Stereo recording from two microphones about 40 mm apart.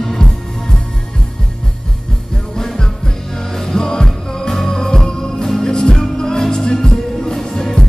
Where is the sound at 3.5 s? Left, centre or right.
Centre.